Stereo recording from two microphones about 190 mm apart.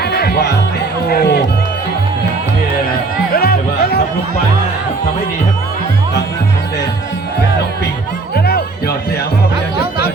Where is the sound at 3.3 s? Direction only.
55° left (ahead or behind).